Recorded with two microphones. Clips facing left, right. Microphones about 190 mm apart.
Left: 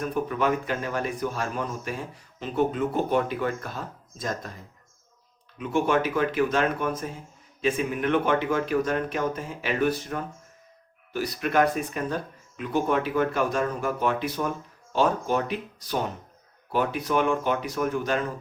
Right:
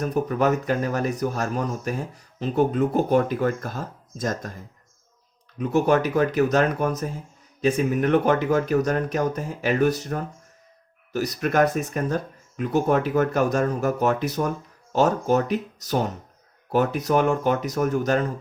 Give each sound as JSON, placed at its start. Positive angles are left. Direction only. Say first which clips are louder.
{"t": 0.0, "sound": "speech", "louder": "right 4 dB", "side_deg": -40}
{"t": 5.5, "sound": "speech", "louder": "right 4 dB", "side_deg": -40}